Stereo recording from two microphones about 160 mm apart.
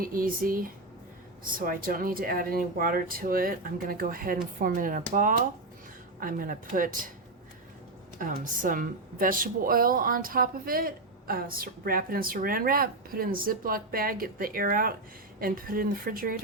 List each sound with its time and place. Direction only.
0.0 s a woman's voice: 60° right (ahead or behind)
6.1 s a woman's voice: 60° right (ahead or behind)
8.2 s a woman's voice: 55° right (ahead or behind)